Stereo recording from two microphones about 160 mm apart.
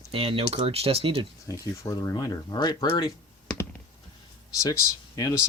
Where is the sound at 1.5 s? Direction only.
20° left (ahead or behind).